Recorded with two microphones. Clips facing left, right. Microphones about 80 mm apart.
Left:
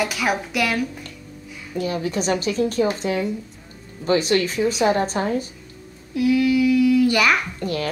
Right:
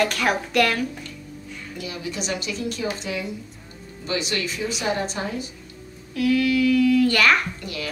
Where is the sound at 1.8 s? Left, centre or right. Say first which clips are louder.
Left 8 dB; left.